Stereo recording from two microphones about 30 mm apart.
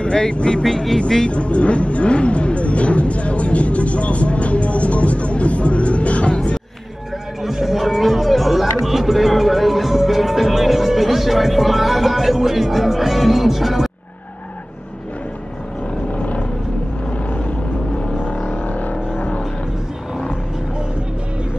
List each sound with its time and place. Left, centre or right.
0.0 s speech: left
0.7 s music: centre
1.3 s speech: left
7.4 s music: centre
16.2 s vehicle: left
18.5 s vehicle: left